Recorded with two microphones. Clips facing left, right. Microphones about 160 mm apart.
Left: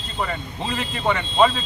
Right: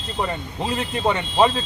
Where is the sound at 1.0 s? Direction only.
25° right (ahead or behind).